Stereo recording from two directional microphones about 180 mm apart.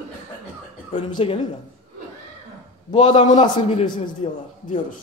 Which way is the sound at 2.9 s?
30° left (ahead or behind).